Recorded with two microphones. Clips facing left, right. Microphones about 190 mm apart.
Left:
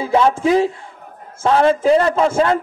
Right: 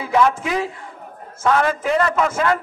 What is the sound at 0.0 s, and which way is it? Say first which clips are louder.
A man's voice: left 3 dB; 30° left (ahead or behind).